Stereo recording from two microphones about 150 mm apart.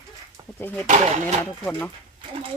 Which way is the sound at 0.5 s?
10° left (ahead or behind).